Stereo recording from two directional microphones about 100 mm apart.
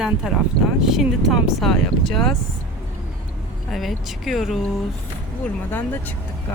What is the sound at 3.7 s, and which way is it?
Speech, centre (ahead or behind).